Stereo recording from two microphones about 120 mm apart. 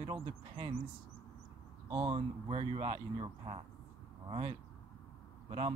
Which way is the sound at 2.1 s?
50° right (ahead or behind).